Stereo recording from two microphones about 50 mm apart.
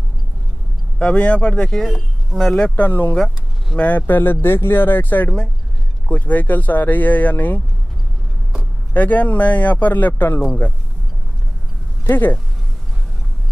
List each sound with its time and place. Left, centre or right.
0.9 s a man's voice: left
1.9 s speech: centre
2.7 s speech: left
4.2 s speech: left
8.9 s speech: left
12.1 s speech: left